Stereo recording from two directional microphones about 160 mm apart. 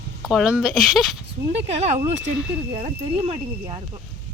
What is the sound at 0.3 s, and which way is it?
Speech, 5° right (ahead or behind).